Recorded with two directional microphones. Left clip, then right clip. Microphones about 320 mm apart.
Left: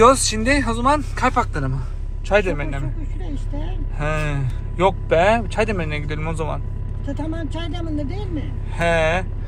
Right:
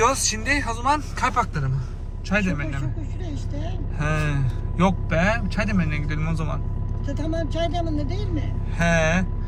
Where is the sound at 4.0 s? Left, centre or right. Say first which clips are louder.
Left 2 dB; centre.